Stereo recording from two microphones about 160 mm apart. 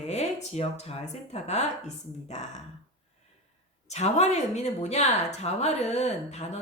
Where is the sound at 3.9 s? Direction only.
45° left (ahead or behind).